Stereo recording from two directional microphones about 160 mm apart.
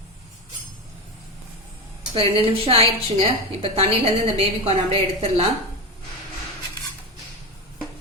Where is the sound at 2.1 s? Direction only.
35° right (ahead or behind).